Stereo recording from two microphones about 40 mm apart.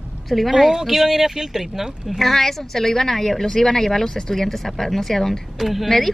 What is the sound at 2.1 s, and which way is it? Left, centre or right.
A woman's voice, centre.